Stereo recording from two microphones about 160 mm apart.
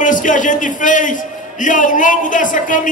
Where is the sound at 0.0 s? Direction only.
55° left (ahead or behind).